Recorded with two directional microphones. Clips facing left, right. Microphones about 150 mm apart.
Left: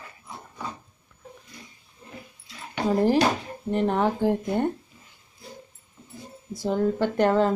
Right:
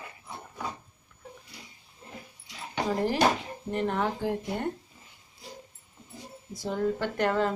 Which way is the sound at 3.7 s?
35° left (ahead or behind).